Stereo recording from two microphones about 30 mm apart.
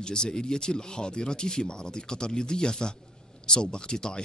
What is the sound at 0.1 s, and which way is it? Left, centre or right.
Speech, left.